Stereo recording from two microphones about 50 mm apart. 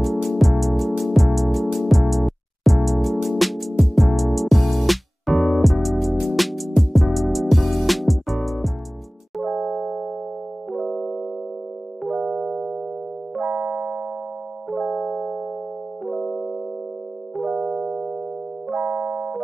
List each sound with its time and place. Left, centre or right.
0.0 s music: centre
9.4 s music: centre
10.7 s keyboard: centre
12.1 s music: centre
13.4 s keyboard: right
14.7 s keyboard: centre
16.1 s music: centre
17.6 s music: centre
18.8 s keyboard: right